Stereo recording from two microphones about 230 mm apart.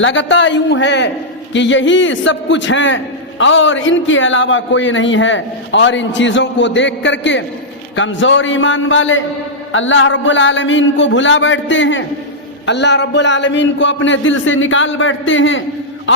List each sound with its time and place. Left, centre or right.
0.0 s a man's voice: left